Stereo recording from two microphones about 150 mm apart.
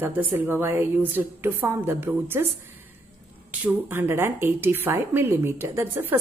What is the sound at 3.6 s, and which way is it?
A woman's voice, 15° right (ahead or behind).